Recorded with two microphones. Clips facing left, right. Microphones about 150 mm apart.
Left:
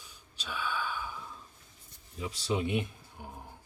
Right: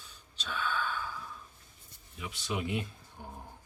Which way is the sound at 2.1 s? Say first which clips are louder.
Left 4 dB; 35° left (ahead or behind).